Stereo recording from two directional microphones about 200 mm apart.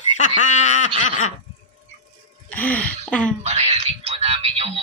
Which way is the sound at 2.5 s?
5° left (ahead or behind).